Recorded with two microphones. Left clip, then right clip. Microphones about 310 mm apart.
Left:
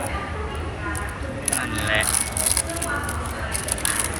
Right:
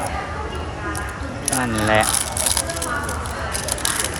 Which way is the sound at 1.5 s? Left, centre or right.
Centre.